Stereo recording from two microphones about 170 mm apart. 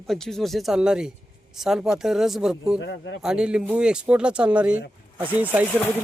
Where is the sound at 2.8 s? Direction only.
90° left.